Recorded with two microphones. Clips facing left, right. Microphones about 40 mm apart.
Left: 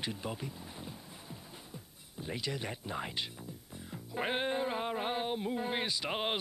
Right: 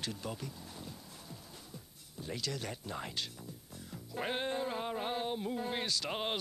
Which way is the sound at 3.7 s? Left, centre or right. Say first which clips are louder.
Left 3 dB; left.